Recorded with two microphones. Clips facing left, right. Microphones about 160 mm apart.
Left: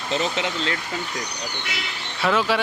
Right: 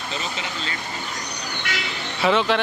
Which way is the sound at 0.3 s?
70° left (ahead or behind).